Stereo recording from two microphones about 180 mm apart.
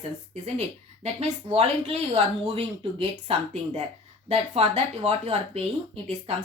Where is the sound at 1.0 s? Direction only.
35° right (ahead or behind).